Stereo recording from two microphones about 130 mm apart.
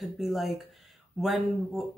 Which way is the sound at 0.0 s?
Centre (ahead or behind).